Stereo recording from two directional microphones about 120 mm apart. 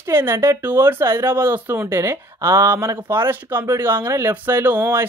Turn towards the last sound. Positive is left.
turn(degrees=-15)  # may be behind; listen again after turning